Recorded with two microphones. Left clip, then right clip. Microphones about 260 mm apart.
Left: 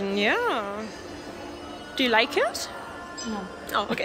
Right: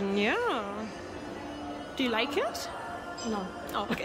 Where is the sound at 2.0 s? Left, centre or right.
Centre.